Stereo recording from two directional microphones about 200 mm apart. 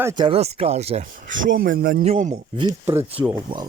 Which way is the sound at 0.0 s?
20° right (ahead or behind).